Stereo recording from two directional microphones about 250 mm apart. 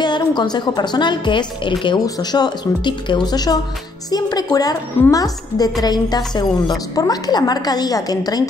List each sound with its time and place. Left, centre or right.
0.0 s a woman's voice: centre